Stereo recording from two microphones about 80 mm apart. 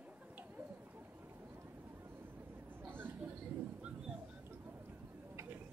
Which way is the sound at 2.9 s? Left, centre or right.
Right.